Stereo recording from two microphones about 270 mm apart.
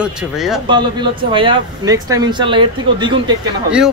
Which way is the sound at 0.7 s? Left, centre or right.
Centre.